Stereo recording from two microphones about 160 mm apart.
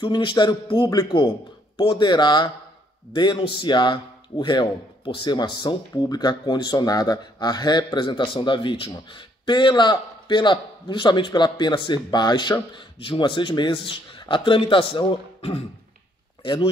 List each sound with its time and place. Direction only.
0.0 s a man's voice: 30° left (ahead or behind)